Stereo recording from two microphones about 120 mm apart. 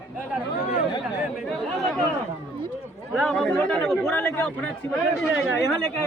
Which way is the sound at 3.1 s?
5° left (ahead or behind).